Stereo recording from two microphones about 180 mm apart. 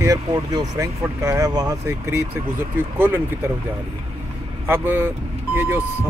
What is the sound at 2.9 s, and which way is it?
Speech, 10° right (ahead or behind).